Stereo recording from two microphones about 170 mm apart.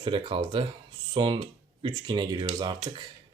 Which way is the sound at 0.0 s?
30° right (ahead or behind).